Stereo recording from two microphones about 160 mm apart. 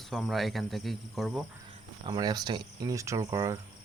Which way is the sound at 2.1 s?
25° right (ahead or behind).